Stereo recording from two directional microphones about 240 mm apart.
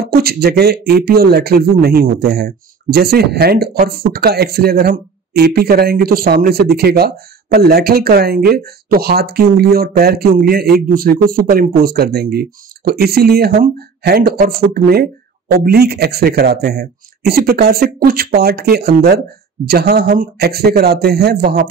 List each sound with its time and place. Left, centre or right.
0.0 s a man's voice: right